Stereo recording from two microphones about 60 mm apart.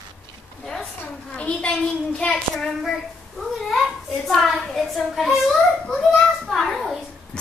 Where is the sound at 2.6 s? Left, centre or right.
Centre.